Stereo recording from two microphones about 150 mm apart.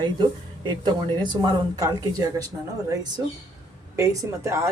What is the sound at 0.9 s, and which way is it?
Speech, 30° right (ahead or behind).